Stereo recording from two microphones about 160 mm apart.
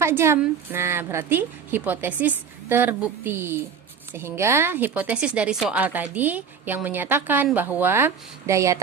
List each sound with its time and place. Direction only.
0.0 s a woman's voice: 15° right (ahead or behind)